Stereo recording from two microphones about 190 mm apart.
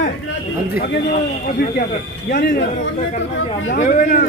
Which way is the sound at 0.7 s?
55° left (ahead or behind).